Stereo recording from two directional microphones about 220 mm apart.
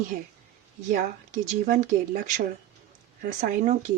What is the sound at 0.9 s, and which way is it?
Speech, 35° right (ahead or behind).